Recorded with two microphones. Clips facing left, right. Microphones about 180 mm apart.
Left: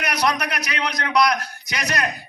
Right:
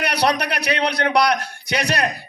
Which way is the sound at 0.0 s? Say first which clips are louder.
Right 3 dB; 30° right (ahead or behind).